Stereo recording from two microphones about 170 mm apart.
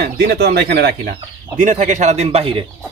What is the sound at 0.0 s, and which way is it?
Speech, 70° right (ahead or behind).